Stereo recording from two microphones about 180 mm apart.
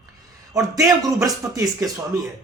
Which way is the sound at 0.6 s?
20° right (ahead or behind).